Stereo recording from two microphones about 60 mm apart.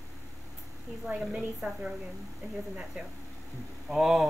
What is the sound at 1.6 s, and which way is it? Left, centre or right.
Speech, right.